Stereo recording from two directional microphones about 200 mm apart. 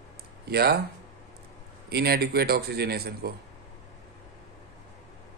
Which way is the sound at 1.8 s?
50° right (ahead or behind).